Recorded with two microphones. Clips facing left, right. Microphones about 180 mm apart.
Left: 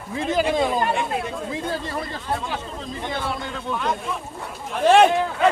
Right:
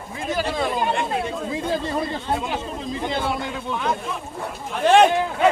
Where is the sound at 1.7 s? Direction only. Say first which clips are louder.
Right 4 dB; 20° right (ahead or behind).